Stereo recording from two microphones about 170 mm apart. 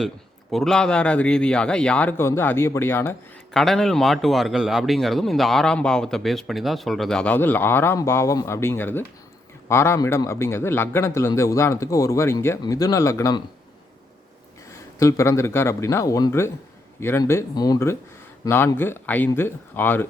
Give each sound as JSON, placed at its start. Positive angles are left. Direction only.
{"t": 0.5, "sound": "a man's voice", "side_deg": 5}
{"t": 3.5, "sound": "a man's voice", "side_deg": 0}
{"t": 14.7, "sound": "a man's voice", "side_deg": 20}